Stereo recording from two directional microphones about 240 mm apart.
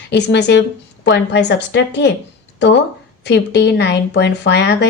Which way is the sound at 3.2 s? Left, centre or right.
Left.